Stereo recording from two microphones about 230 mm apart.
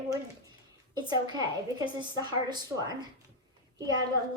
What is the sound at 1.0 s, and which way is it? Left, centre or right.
A woman's voice, centre.